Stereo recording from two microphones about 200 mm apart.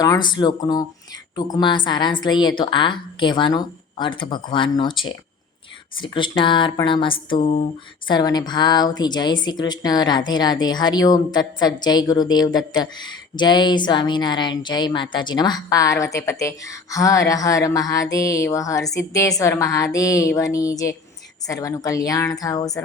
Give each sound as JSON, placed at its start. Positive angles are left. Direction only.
{"t": 0.0, "sound": "a woman's voice", "side_deg": 20}
{"t": 6.0, "sound": "a woman's voice", "side_deg": 25}